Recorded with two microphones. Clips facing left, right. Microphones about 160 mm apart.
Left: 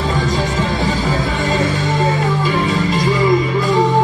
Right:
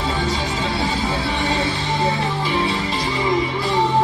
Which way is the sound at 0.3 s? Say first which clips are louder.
Left 5 dB; 40° left (ahead or behind).